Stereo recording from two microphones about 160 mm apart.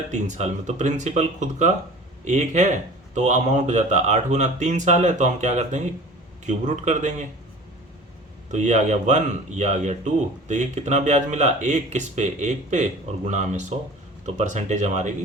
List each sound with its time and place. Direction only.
0.1 s speech: 45° right (ahead or behind)
8.4 s speech: 50° right (ahead or behind)